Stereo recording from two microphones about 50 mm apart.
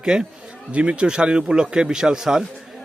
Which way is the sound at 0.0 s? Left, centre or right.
Centre.